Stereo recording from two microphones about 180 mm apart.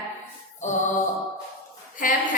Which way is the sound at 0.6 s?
40° left (ahead or behind).